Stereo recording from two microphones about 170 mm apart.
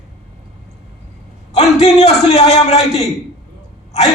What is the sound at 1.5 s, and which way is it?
A man's voice, 40° left (ahead or behind).